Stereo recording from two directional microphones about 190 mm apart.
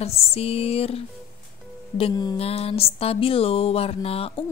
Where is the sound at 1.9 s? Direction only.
25° left (ahead or behind).